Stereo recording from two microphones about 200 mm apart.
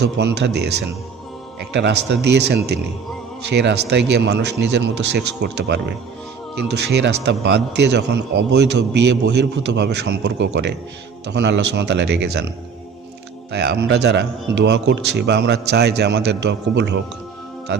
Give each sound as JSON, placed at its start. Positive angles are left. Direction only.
{"t": 0.0, "sound": "a man's voice", "side_deg": -60}
{"t": 13.5, "sound": "a man's voice", "side_deg": -55}